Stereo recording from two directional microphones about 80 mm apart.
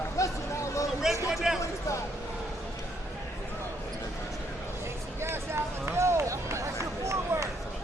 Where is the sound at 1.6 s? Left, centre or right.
Left.